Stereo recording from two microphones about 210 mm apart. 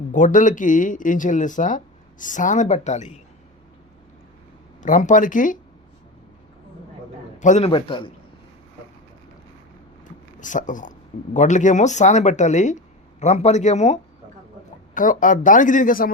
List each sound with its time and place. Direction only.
0.1 s speech: 35° left (ahead or behind)
4.8 s speech: 35° left (ahead or behind)
7.3 s a man's voice: 35° left (ahead or behind)
7.7 s a man's voice: 25° left (ahead or behind)
10.0 s a sound: 35° left (ahead or behind)
11.3 s speech: 35° left (ahead or behind)